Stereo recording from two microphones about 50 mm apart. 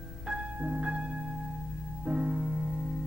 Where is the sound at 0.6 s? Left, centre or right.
Right.